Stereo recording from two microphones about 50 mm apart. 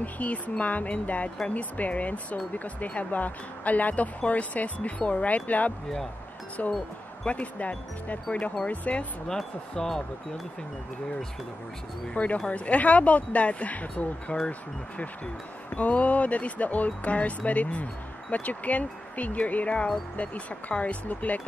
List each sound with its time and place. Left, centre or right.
0.0 s speech: left
9.3 s speech: centre
12.4 s speech: left
15.7 s speech: left